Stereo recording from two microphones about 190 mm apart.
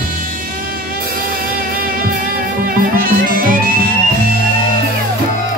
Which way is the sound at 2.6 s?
50° right (ahead or behind).